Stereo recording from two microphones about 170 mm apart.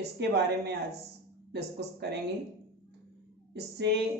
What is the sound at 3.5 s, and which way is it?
Female singing, 80° right.